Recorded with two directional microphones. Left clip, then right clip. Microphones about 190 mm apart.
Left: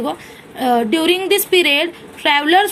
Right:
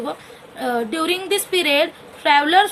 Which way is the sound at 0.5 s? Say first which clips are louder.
Left 6 dB; 20° left (ahead or behind).